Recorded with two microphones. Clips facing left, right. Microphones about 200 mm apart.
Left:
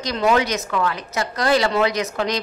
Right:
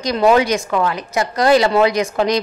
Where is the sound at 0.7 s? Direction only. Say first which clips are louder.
Right 4 dB; 30° right (ahead or behind).